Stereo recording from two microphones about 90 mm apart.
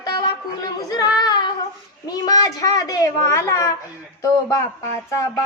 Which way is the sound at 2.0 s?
45° left (ahead or behind).